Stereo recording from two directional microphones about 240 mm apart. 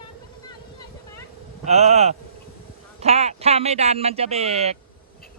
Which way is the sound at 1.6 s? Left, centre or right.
Right.